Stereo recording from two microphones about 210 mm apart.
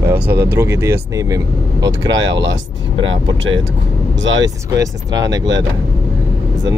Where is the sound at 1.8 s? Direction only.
60° right (ahead or behind).